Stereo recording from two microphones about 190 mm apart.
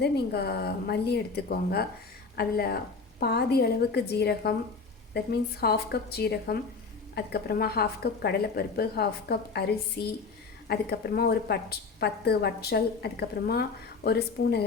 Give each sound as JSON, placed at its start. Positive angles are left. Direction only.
{"t": 0.0, "sound": "a woman's voice", "side_deg": 55}